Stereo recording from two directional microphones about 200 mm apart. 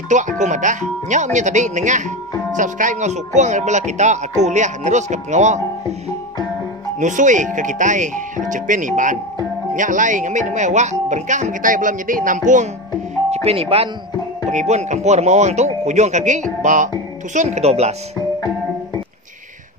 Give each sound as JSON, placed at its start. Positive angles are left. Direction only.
{"t": 0.1, "sound": "speech", "side_deg": -40}